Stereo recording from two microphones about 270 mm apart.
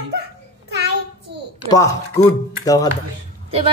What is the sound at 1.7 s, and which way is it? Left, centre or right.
Speech, centre.